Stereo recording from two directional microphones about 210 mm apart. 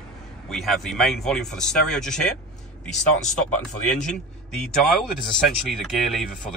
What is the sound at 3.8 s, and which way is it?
Speech, 35° left (ahead or behind).